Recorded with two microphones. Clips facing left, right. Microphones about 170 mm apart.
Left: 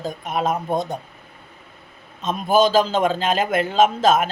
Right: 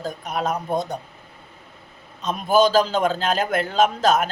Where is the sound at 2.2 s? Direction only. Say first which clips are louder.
Even; centre (ahead or behind).